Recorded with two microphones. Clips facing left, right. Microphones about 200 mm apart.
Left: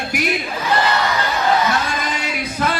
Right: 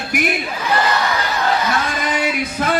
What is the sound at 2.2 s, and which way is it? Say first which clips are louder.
Music: right 2 dB; 55° right (ahead or behind).